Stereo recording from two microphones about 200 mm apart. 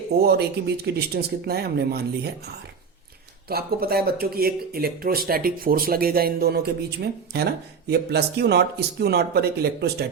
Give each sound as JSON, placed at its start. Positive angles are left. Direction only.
{"t": 0.2, "sound": "speech", "side_deg": -50}
{"t": 3.5, "sound": "speech", "side_deg": -50}